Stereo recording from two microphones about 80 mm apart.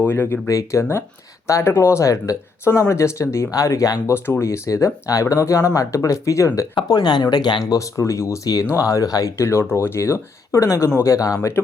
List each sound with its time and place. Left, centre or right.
0.0 s speech: left
0.4 s speech: left
4.0 s speech: left
6.8 s speech: left
7.7 s speech: left
9.4 s speech: left
11.6 s speech: left